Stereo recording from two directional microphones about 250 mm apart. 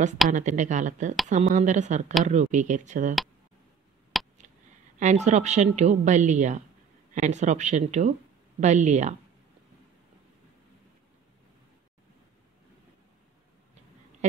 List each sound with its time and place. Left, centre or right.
0.3 s a woman's voice: right
4.1 s a sound: centre
4.9 s a woman's voice: right